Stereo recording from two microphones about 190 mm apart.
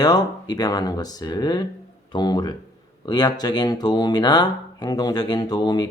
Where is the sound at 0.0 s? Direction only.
20° left (ahead or behind).